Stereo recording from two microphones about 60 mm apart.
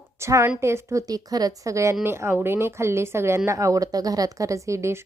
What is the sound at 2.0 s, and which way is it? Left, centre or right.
Speech, right.